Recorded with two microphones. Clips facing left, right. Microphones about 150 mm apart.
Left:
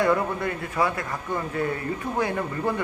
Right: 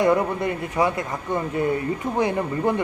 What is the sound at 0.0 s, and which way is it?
A man's voice, 20° right (ahead or behind).